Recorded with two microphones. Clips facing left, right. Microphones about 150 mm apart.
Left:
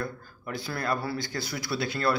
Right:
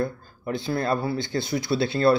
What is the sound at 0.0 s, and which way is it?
Speech, 25° right (ahead or behind).